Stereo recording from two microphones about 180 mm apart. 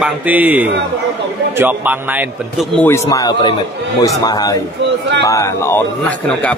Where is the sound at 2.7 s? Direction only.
15° left (ahead or behind).